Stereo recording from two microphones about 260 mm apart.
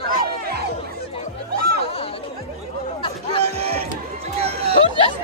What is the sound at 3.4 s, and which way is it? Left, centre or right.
Music, right.